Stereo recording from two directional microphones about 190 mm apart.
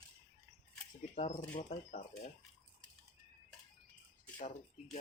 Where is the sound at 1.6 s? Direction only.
40° left (ahead or behind).